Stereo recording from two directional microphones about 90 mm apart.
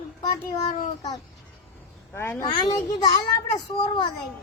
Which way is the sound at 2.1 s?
30° left (ahead or behind).